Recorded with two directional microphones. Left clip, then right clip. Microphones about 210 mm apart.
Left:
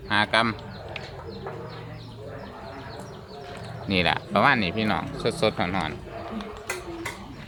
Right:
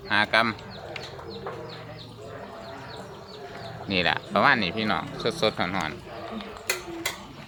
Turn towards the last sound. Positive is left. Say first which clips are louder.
# right 3 dB
turn(degrees=-40)  # may be behind; listen again after turning